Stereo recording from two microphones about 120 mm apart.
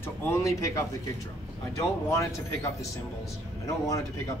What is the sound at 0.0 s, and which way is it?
Speech, 20° left (ahead or behind).